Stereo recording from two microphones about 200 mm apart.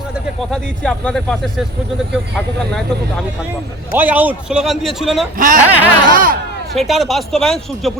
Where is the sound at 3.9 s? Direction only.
10° right (ahead or behind).